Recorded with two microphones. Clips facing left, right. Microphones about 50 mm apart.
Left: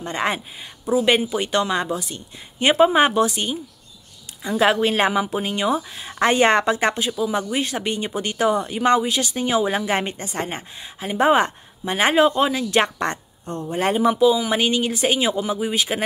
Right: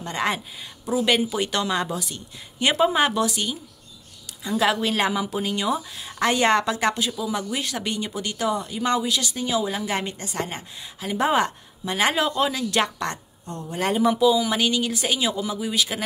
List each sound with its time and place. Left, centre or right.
0.0 s speech: centre